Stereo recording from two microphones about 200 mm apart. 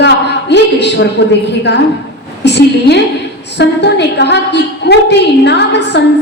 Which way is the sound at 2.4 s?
60° left (ahead or behind).